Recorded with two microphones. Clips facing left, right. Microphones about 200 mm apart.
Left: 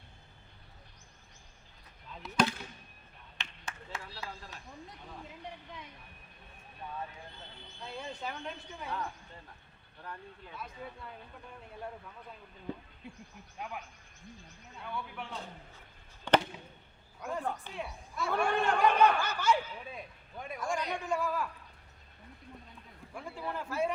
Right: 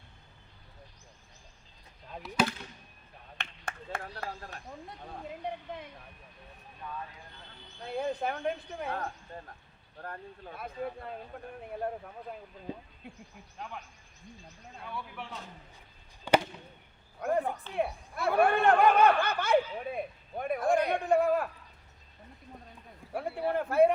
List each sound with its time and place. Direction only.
2.2 s speech: 5° right (ahead or behind)
3.3 s a sound: 55° right (ahead or behind)
7.9 s speech: 60° right (ahead or behind)
14.8 s a man's voice: centre (ahead or behind)
16.3 s chop: 10° right (ahead or behind)
17.2 s a man's voice: 55° right (ahead or behind)
23.1 s speech: 60° right (ahead or behind)